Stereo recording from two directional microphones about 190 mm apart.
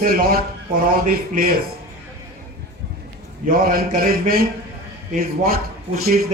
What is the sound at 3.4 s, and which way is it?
A man's voice, 50° right (ahead or behind).